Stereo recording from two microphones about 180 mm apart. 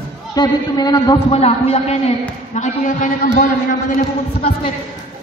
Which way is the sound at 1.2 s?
35° left (ahead or behind).